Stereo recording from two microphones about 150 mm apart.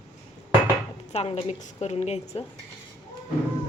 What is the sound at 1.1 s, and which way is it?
A woman's voice, 45° left (ahead or behind).